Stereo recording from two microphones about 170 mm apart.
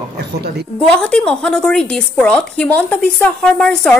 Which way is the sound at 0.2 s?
70° right (ahead or behind).